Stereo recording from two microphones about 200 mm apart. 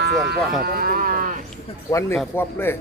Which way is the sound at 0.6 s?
50° right (ahead or behind).